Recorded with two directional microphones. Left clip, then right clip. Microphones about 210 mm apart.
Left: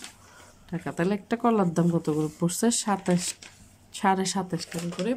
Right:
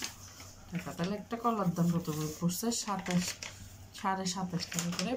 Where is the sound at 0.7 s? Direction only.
45° left (ahead or behind).